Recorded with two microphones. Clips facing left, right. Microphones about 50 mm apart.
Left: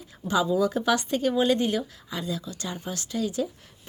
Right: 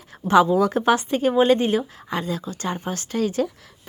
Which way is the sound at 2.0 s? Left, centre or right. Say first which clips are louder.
Right 5 dB; right.